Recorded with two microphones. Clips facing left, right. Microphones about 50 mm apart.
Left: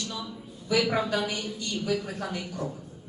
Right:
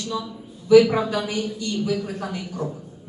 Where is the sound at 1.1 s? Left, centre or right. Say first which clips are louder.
Right 2 dB; right.